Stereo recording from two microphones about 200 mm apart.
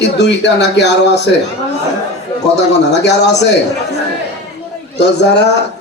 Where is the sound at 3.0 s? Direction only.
60° left (ahead or behind).